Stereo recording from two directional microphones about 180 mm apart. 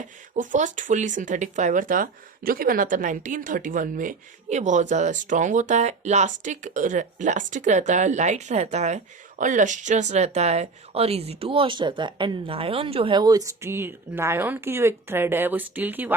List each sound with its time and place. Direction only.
0.3 s speech: 45° right (ahead or behind); by 16.1 s 10° right (ahead or behind)